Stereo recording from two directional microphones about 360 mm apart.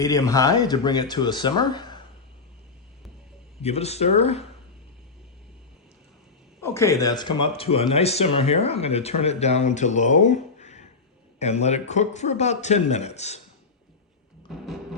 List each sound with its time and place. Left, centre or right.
0.0 s speech: centre
3.6 s speech: centre
6.6 s speech: centre